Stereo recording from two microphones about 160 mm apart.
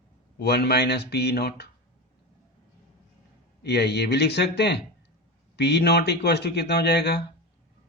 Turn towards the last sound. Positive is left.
turn(degrees=90)